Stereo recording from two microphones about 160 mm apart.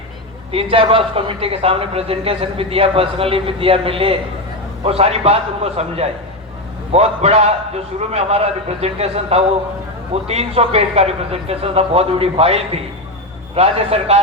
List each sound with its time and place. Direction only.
0.5 s a man's voice: 35° right (ahead or behind)